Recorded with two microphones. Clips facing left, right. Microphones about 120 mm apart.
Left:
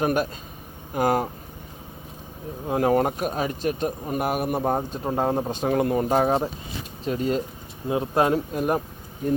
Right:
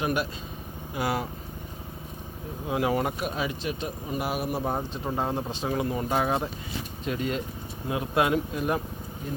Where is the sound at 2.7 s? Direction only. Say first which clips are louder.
Left 5 dB; 45° left (ahead or behind).